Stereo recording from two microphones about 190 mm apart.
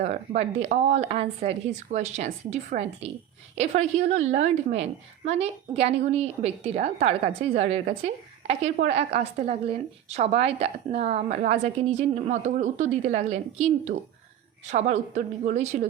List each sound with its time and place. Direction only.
0.0 s a woman's voice: 35° right (ahead or behind)